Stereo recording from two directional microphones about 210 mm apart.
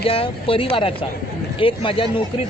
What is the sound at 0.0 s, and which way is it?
Speech, 25° left (ahead or behind).